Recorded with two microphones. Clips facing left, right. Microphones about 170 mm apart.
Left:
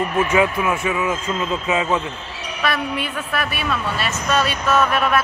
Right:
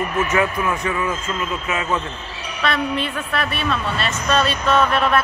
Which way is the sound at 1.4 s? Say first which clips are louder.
Left 3 dB; 20° left (ahead or behind).